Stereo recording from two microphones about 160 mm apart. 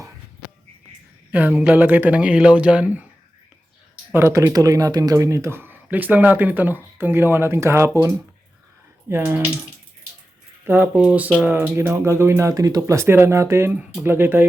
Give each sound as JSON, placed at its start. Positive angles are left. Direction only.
{"t": 1.3, "sound": "speech", "side_deg": -10}
{"t": 4.1, "sound": "speech", "side_deg": -15}
{"t": 9.0, "sound": "speech", "side_deg": -15}
{"t": 10.7, "sound": "speech", "side_deg": -10}